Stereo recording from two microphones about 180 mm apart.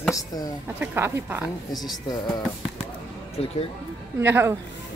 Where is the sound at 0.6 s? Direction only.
10° right (ahead or behind).